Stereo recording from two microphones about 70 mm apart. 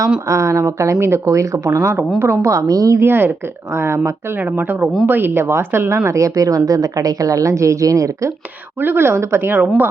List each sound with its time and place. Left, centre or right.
0.3 s speech: right
3.0 s speech: right
4.4 s speech: right
6.1 s speech: right
8.8 s speech: right
9.6 s speech: right